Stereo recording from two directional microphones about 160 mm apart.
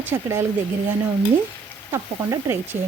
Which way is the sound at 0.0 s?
15° right (ahead or behind).